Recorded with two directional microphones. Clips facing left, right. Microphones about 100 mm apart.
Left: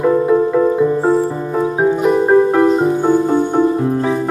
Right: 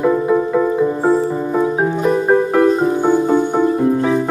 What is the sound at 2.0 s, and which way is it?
Music, 20° left (ahead or behind).